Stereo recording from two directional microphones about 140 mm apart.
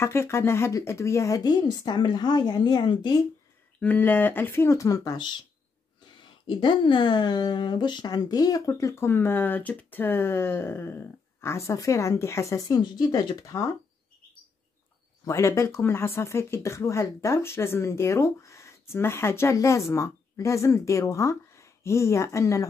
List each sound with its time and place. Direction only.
0.0 s speech: 20° left (ahead or behind)
3.8 s speech: 15° left (ahead or behind)
15.2 s speech: 20° left (ahead or behind)